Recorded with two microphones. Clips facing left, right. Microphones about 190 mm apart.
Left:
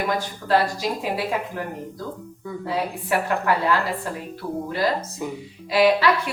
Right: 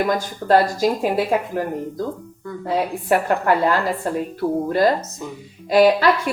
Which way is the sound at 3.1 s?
45° right (ahead or behind).